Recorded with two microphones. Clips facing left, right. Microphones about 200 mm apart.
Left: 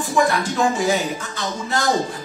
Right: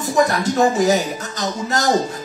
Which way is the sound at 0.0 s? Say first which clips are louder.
Right 2 dB; 40° right (ahead or behind).